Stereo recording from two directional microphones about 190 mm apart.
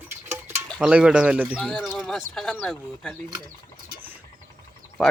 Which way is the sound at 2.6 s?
5° left (ahead or behind).